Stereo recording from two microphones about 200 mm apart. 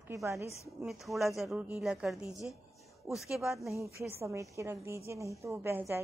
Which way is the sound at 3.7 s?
15° right (ahead or behind).